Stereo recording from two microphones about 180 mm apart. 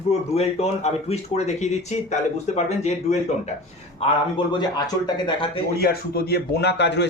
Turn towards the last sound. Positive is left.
turn(degrees=75)  # may be behind; listen again after turning